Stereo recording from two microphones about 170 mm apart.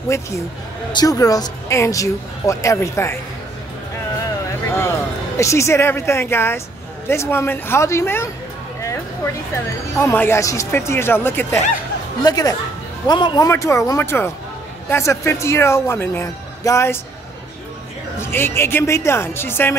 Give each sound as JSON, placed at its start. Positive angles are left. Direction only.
{"t": 0.9, "sound": "speech", "side_deg": 20}
{"t": 4.6, "sound": "speech", "side_deg": 15}
{"t": 8.8, "sound": "music", "side_deg": 15}
{"t": 9.9, "sound": "speech", "side_deg": 15}
{"t": 18.2, "sound": "speech", "side_deg": 15}